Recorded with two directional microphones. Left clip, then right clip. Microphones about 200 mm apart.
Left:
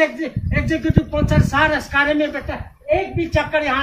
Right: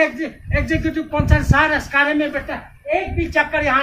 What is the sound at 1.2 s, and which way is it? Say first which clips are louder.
Speech: right 1 dB; 5° right (ahead or behind).